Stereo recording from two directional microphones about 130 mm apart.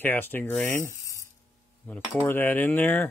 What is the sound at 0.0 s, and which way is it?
Speech, 15° left (ahead or behind).